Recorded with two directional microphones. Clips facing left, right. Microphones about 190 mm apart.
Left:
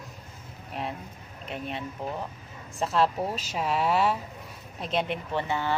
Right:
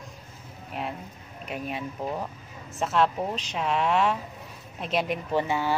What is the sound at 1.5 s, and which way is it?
A woman's voice, 10° right (ahead or behind).